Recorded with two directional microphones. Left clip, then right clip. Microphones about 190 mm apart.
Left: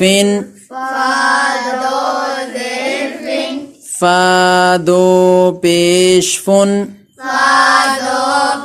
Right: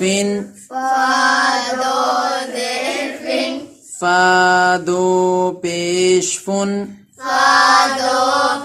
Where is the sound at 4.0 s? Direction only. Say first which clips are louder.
Left 3 dB; 40° left (ahead or behind).